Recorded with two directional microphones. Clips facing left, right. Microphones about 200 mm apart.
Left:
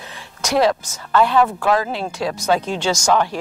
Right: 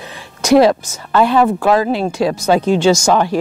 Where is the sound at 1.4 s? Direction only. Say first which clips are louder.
Right 4 dB; 30° right (ahead or behind).